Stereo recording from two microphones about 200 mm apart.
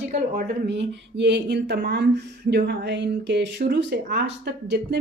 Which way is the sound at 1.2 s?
60° right (ahead or behind).